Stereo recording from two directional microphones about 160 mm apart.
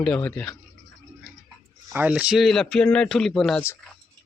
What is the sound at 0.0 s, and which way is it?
Speech, 10° left (ahead or behind).